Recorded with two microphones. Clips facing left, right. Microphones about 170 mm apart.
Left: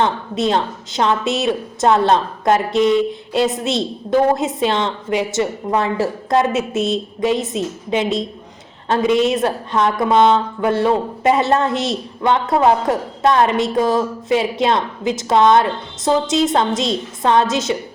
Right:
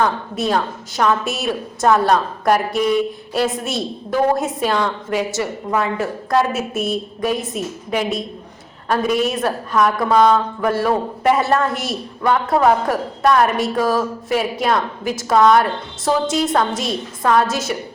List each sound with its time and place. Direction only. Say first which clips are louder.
0.0 s speech: left 1 dB; 25° left (ahead or behind)